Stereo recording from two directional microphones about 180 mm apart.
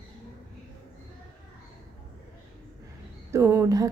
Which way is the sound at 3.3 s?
10° right (ahead or behind).